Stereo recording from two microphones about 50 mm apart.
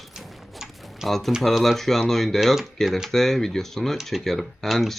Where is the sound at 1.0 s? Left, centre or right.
Centre.